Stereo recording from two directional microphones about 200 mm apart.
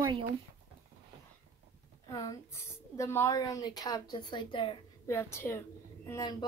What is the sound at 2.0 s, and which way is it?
A woman's voice, 15° left (ahead or behind).